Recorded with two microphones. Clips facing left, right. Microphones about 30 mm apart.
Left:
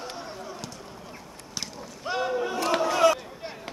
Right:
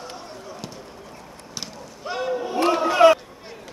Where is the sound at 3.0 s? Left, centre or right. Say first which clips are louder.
Right 8 dB; right.